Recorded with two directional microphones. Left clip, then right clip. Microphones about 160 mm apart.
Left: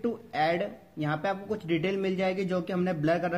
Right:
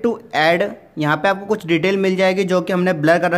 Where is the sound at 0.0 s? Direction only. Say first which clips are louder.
Right 12 dB; 25° right (ahead or behind).